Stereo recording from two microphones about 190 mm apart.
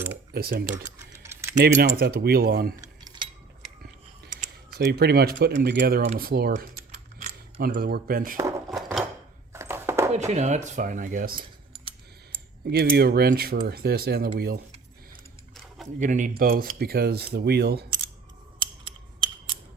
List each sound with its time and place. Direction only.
0.3 s speech: 55° right (ahead or behind)
1.1 s typing: 15° right (ahead or behind)
1.5 s speech: 55° right (ahead or behind)
2.8 s cutlery: 20° right (ahead or behind)
4.4 s speech: 55° right (ahead or behind)
7.2 s speech: 40° right (ahead or behind)
8.4 s a sound: 15° right (ahead or behind)
10.1 s speech: 35° right (ahead or behind)
11.7 s a sound: 30° right (ahead or behind)
12.7 s speech: 55° right (ahead or behind)
16.0 s speech: 45° right (ahead or behind); by 17.8 s 60° right (ahead or behind)
18.6 s a sound: 25° right (ahead or behind)